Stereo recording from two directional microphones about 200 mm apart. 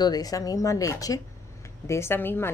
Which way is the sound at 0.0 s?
20° left (ahead or behind).